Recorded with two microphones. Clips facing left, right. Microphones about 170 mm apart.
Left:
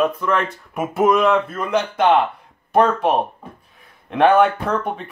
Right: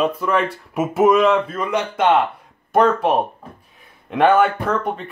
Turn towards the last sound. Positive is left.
turn(degrees=0)  # may be behind; listen again after turning